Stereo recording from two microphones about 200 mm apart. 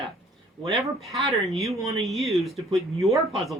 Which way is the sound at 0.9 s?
Centre (ahead or behind).